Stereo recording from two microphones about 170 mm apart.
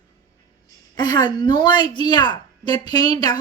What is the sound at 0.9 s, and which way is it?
A woman's voice, 25° left (ahead or behind).